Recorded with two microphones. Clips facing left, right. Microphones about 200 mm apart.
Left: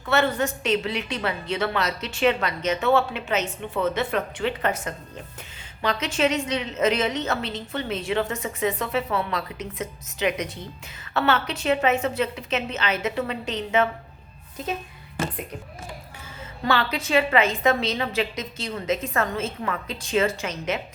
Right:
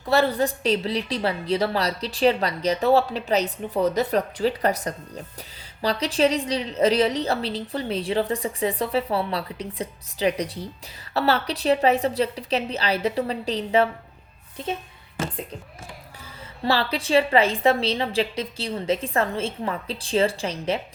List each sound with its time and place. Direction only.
0.0 s a woman's voice: 35° right (ahead or behind)
16.6 s a woman's voice: 30° right (ahead or behind)